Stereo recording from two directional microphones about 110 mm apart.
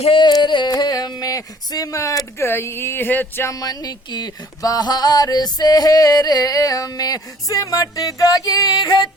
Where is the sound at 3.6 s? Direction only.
35° left (ahead or behind).